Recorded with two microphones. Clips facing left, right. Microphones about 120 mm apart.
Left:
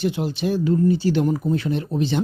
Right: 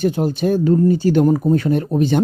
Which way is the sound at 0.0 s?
45° right (ahead or behind).